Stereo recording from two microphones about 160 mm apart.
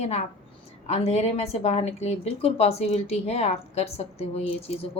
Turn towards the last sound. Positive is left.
turn(degrees=40)  # may be behind; listen again after turning